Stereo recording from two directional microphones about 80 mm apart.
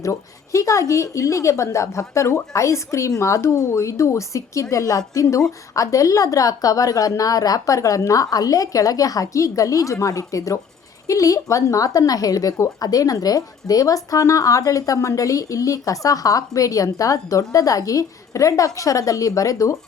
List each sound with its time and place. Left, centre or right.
0.0 s a woman's voice: left